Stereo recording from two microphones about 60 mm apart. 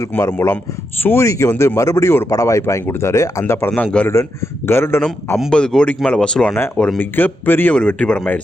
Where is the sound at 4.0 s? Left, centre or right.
Centre.